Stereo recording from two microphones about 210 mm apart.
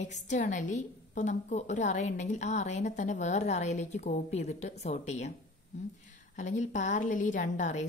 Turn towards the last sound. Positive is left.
turn(degrees=35)  # may be behind; listen again after turning